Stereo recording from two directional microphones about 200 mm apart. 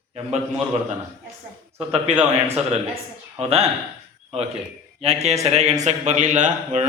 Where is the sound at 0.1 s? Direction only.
30° right (ahead or behind).